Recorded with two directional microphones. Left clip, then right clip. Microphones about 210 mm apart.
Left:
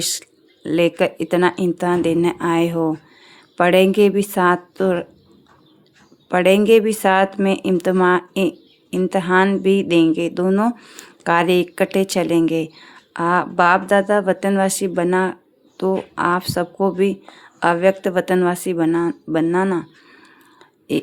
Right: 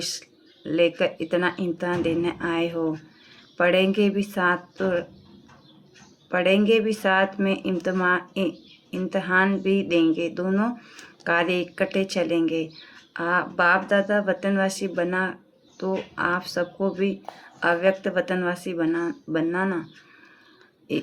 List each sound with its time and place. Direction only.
0.0 s speech: 50° left (ahead or behind)
6.2 s speech: 50° left (ahead or behind)